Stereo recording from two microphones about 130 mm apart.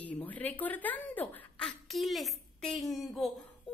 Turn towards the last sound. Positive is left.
turn(degrees=0)  # may be behind; listen again after turning